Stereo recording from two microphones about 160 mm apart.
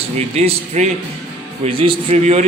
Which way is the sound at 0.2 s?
40° right (ahead or behind).